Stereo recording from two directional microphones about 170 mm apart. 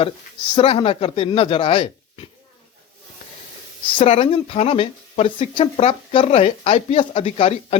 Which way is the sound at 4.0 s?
35° left (ahead or behind).